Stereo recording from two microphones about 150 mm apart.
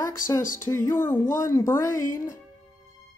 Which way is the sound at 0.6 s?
15° left (ahead or behind).